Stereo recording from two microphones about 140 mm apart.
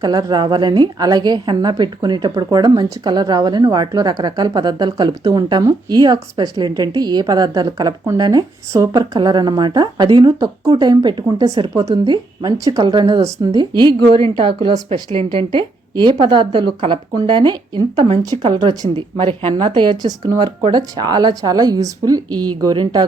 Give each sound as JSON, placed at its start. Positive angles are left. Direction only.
{"t": 0.0, "sound": "a woman's voice", "side_deg": -30}
{"t": 18.7, "sound": "a woman's voice", "side_deg": -30}
{"t": 19.1, "sound": "a woman's voice", "side_deg": -40}